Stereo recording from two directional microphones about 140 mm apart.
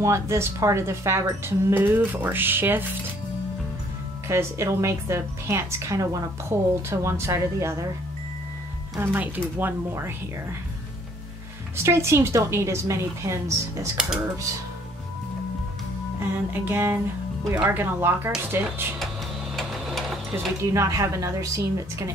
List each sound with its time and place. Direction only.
0.0 s speech: 20° right (ahead or behind)
4.3 s speech: 20° right (ahead or behind)
9.0 s speech: 15° right (ahead or behind)
11.7 s speech: 20° right (ahead or behind)
14.0 s speech: 5° right (ahead or behind)
16.2 s speech: 15° right (ahead or behind)
19.5 s sewing machine: centre (ahead or behind)
20.3 s speech: 20° right (ahead or behind)